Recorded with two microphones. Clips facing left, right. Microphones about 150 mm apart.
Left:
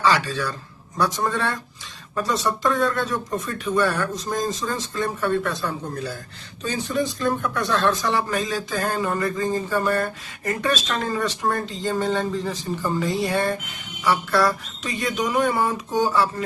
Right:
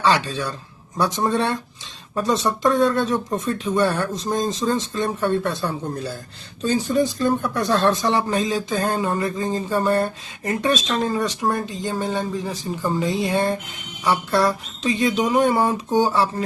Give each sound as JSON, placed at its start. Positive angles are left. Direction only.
{"t": 0.0, "sound": "speech", "side_deg": -25}
{"t": 6.9, "sound": "speech", "side_deg": -35}